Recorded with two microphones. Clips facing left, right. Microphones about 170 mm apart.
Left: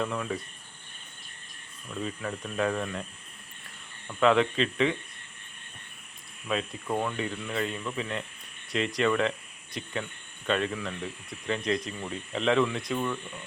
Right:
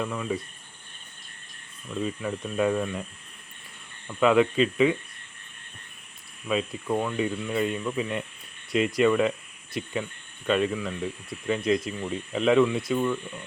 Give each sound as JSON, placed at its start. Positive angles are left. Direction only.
{"t": 0.0, "sound": "speech", "side_deg": -5}
{"t": 1.9, "sound": "speech", "side_deg": -10}
{"t": 4.2, "sound": "speech", "side_deg": -10}
{"t": 6.5, "sound": "speech", "side_deg": -5}